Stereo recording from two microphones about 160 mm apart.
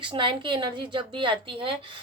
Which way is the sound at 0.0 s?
30° right (ahead or behind).